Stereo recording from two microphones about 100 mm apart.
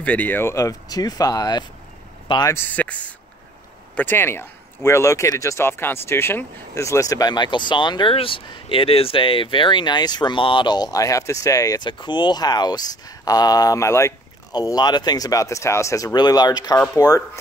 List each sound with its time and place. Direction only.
0.0 s speech: 15° left (ahead or behind); by 1.6 s 40° left (ahead or behind)
2.5 s speech: 20° left (ahead or behind)
14.5 s speech: 40° left (ahead or behind)